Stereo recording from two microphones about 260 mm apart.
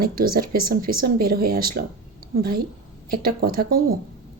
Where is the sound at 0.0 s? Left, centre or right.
Right.